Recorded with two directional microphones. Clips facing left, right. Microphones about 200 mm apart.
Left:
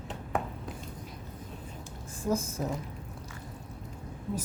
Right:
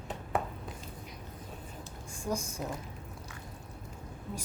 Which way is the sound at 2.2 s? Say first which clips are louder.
Left 5 dB; 5° left (ahead or behind).